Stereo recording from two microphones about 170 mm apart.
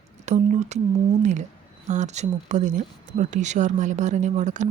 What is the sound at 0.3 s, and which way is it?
Speech, 45° right (ahead or behind).